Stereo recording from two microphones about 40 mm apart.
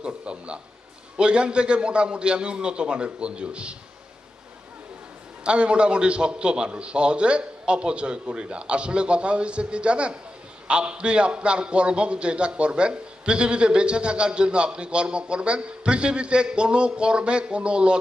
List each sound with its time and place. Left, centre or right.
0.0 s a sound: right
1.1 s a man's voice: right
5.4 s a man's voice: right